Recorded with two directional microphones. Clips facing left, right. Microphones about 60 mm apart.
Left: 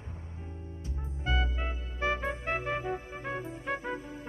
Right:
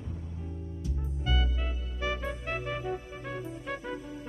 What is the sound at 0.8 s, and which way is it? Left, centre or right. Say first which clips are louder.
Music: even; left.